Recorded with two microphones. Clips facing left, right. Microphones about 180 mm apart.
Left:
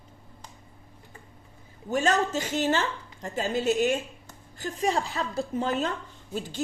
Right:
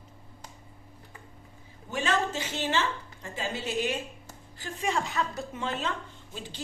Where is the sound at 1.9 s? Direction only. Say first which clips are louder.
Left 4 dB; 45° left (ahead or behind).